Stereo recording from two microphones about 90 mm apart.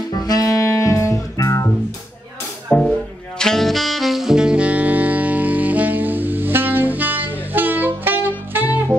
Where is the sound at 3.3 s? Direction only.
5° left (ahead or behind); by 8.9 s 20° right (ahead or behind).